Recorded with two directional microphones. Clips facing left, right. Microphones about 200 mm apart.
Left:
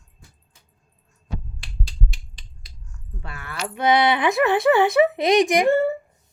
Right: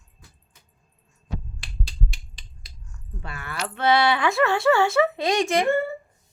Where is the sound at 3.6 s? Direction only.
10° left (ahead or behind).